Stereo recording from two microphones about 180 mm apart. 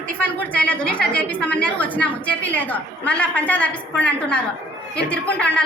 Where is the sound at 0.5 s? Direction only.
10° left (ahead or behind).